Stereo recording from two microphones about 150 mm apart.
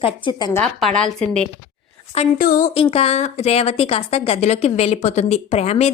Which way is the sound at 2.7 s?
40° left (ahead or behind).